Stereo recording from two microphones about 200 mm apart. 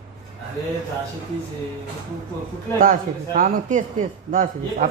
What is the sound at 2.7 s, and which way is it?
A man's voice, 45° right (ahead or behind).